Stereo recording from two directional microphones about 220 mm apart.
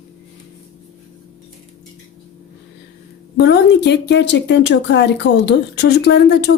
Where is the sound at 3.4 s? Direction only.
50° left (ahead or behind).